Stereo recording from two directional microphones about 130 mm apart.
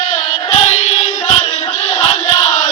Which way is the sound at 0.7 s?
65° left (ahead or behind).